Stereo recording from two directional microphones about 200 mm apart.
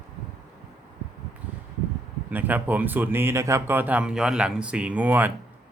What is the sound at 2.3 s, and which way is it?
Speech, 10° right (ahead or behind).